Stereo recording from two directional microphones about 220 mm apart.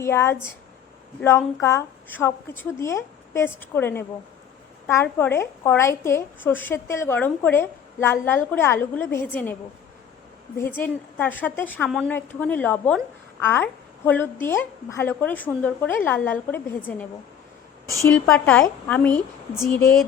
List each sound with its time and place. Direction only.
0.0 s a woman's voice: 10° left (ahead or behind)
10.6 s a woman's voice: 10° left (ahead or behind)